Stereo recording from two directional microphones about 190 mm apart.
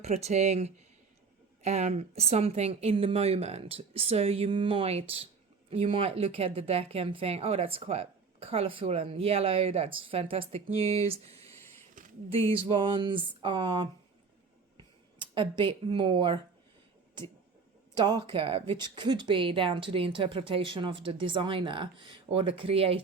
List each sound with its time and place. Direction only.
0.0 s speech: 35° right (ahead or behind)
12.0 s a sound: 45° right (ahead or behind)
12.3 s speech: 30° right (ahead or behind)
15.2 s speech: 25° right (ahead or behind)
17.9 s speech: 25° right (ahead or behind)